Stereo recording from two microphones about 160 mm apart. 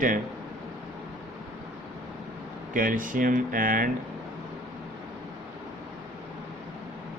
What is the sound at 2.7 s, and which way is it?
Speech, 60° right (ahead or behind).